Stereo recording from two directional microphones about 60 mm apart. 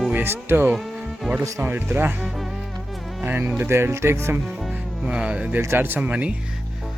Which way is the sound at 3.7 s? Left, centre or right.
Right.